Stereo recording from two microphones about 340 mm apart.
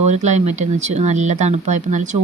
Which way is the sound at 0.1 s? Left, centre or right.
Centre.